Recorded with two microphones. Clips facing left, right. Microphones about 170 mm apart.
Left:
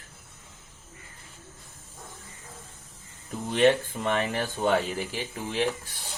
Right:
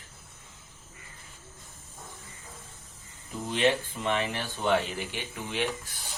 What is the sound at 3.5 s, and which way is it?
Speech, 45° left (ahead or behind).